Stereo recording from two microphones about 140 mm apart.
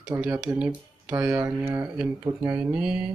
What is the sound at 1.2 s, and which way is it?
Speech, 20° right (ahead or behind).